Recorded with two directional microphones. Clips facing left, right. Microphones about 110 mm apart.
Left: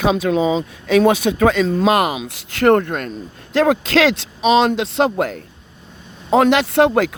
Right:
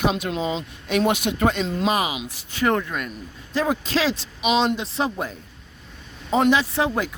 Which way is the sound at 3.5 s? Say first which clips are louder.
Left 8 dB; 90° left.